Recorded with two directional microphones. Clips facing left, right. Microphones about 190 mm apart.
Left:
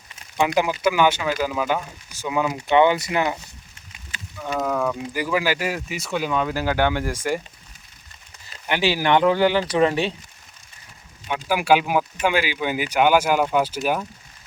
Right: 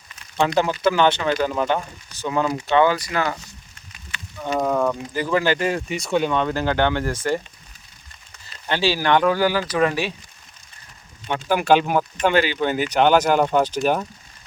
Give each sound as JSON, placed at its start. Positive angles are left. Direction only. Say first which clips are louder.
{"t": 0.3, "sound": "speech", "louder": "right 1 dB", "side_deg": 10}
{"t": 4.1, "sound": "a sound", "louder": "right 1 dB", "side_deg": 40}
{"t": 4.4, "sound": "speech", "louder": "right 3 dB", "side_deg": -15}
{"t": 5.1, "sound": "speech", "louder": "right 3 dB", "side_deg": 10}
{"t": 8.6, "sound": "speech", "louder": "even", "side_deg": 15}
{"t": 11.3, "sound": "speech", "louder": "right 1 dB", "side_deg": 10}